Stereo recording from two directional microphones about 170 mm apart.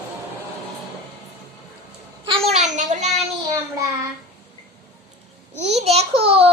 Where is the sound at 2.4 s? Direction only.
45° right (ahead or behind).